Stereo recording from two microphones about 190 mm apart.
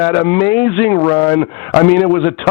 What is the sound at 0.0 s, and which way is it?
A man's voice, 10° left (ahead or behind).